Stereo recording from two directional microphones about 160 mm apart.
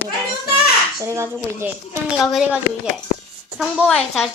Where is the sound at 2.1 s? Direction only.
5° right (ahead or behind).